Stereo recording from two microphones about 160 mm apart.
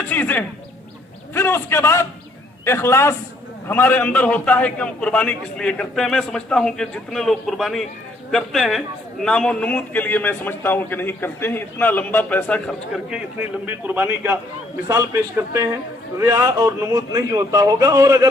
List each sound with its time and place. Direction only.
0.1 s a man's voice: 10° left (ahead or behind); by 18.3 s 20° right (ahead or behind)